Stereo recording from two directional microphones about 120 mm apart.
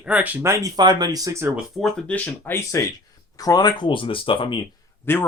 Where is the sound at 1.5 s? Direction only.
Centre (ahead or behind); by 4.6 s 45° left (ahead or behind).